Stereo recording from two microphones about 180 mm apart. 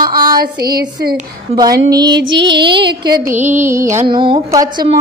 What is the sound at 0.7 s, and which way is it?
Speech, 60° right (ahead or behind).